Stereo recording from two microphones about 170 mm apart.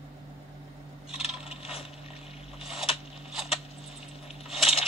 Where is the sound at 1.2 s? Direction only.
35° left (ahead or behind).